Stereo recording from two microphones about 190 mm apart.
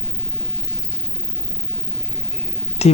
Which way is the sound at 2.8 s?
35° left (ahead or behind).